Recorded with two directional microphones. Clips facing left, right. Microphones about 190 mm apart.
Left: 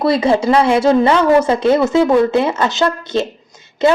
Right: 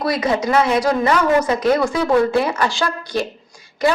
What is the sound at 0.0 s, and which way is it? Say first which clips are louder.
A woman's voice: left 6 dB; 30° left (ahead or behind).